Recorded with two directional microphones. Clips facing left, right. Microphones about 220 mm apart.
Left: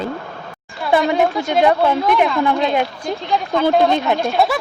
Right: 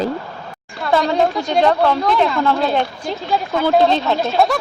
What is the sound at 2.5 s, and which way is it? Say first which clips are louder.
Speech: even; 5° right (ahead or behind).